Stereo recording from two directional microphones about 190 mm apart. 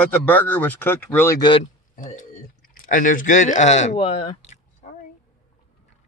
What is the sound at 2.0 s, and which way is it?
Speech, 45° left (ahead or behind).